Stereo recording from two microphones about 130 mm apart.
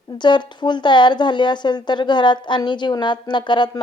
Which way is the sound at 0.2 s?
35° left (ahead or behind).